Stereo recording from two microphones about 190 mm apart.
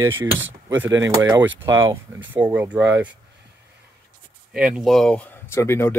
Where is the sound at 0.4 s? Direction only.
80° right.